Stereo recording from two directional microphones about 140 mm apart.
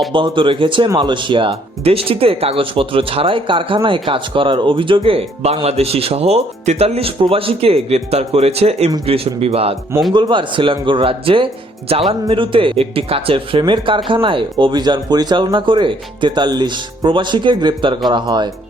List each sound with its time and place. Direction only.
0.1 s speech: 35° right (ahead or behind)
10.1 s speech: 35° right (ahead or behind)